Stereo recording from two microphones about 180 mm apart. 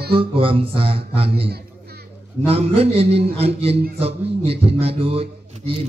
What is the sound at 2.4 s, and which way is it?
A man's voice, 35° right (ahead or behind).